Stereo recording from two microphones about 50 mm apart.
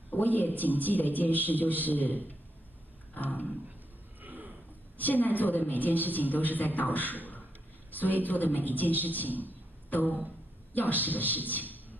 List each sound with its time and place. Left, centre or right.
0.1 s a man's voice: left
3.2 s a man's voice: left
4.2 s a sound: right
4.9 s a woman's voice: left